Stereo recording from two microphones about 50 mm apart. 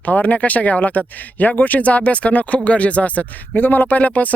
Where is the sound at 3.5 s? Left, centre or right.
Left.